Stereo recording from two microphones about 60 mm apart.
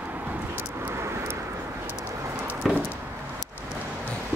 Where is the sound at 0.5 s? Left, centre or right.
Right.